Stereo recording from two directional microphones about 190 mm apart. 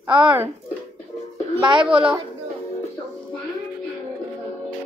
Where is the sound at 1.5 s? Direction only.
25° right (ahead or behind).